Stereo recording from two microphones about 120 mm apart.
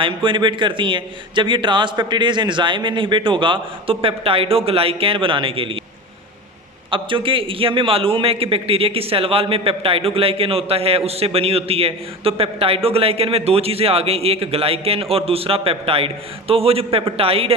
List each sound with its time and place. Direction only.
0.0 s a man's voice: 45° right (ahead or behind)
6.9 s a man's voice: 45° right (ahead or behind)